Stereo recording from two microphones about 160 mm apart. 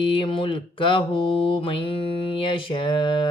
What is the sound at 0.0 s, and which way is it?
Mantra, 30° left (ahead or behind).